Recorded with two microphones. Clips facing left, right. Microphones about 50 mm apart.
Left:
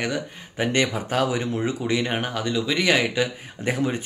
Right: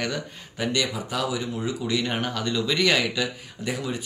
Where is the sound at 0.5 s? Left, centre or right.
Left.